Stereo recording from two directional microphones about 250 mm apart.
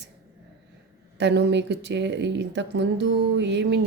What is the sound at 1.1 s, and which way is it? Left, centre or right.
Speech, right.